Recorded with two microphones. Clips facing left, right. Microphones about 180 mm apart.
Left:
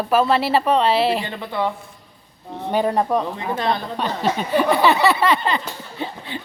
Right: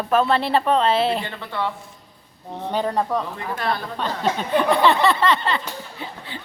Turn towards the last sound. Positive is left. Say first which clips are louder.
# left 1 dB
turn(degrees=10)  # may be behind; listen again after turning